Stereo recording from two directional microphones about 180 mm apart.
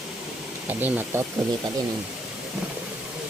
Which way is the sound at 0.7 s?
10° right (ahead or behind).